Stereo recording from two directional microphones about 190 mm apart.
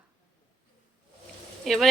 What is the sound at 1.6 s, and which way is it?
Speech, centre (ahead or behind).